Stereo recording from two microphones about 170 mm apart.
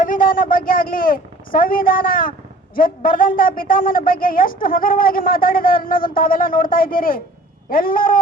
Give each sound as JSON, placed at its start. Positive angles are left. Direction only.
{"t": 0.0, "sound": "a woman's voice", "side_deg": 55}